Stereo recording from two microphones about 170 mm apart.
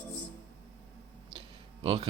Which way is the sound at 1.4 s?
35° right (ahead or behind).